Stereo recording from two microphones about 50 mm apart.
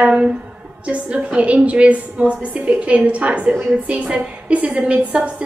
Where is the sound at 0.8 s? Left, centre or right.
Right.